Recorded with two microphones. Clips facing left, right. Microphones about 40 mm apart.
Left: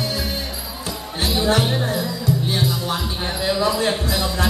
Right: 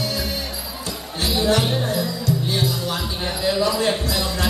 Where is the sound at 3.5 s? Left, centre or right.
Centre.